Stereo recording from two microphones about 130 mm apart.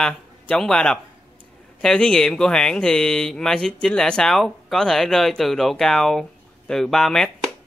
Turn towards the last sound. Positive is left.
turn(degrees=5)  # may be behind; listen again after turning